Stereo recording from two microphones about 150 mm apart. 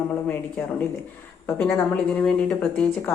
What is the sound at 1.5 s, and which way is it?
A woman's voice, 15° left (ahead or behind).